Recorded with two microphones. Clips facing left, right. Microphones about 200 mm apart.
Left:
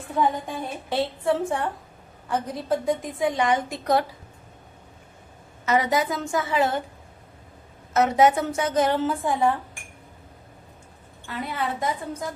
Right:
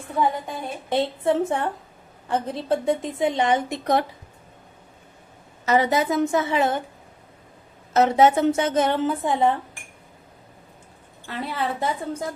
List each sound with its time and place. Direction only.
0.9 s a woman's voice: 20° right (ahead or behind)
5.6 s a woman's voice: 30° right (ahead or behind)
7.9 s a woman's voice: 25° right (ahead or behind)
11.3 s a woman's voice: 30° right (ahead or behind)